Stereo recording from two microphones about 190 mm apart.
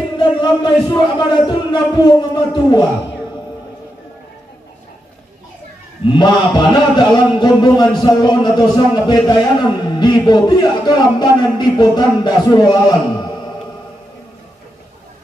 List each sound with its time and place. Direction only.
0.2 s a man's voice: 25° left (ahead or behind)
6.1 s a man's voice: 25° left (ahead or behind)